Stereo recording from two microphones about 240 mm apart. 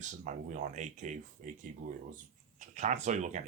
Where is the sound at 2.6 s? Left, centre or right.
Right.